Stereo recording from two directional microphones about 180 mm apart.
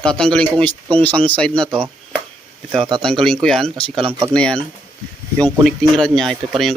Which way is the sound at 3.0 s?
5° left (ahead or behind).